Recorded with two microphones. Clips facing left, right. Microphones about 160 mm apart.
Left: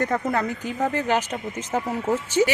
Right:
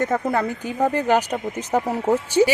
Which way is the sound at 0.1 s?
5° right (ahead or behind).